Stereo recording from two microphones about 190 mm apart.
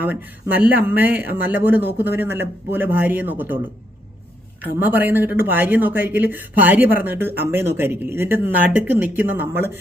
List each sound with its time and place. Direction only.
0.0 s speech: 10° right (ahead or behind)
4.6 s speech: 10° right (ahead or behind)